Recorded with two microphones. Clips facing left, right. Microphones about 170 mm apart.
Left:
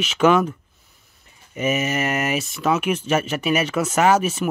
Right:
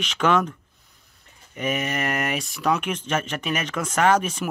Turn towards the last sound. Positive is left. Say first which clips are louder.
# left 3 dB
turn(degrees=5)  # may be behind; listen again after turning